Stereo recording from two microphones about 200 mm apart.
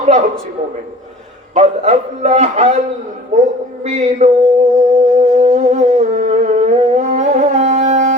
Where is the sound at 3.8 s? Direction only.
35° right (ahead or behind).